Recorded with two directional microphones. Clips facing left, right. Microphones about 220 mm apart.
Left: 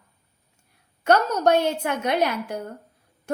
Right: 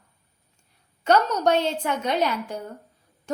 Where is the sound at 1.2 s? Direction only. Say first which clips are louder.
Left 2 dB; 10° left (ahead or behind).